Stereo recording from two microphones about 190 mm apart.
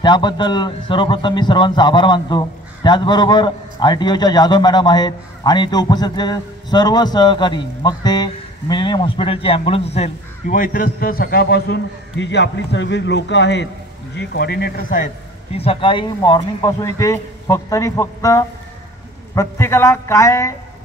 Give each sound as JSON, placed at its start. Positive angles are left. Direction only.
{"t": 0.0, "sound": "a man's voice", "side_deg": 25}
{"t": 15.5, "sound": "a man's voice", "side_deg": 30}